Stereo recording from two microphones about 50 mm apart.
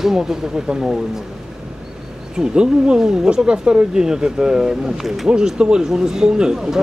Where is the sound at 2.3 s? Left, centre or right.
Centre.